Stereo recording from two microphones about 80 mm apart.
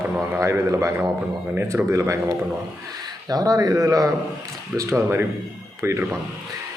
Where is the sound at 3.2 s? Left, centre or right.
Right.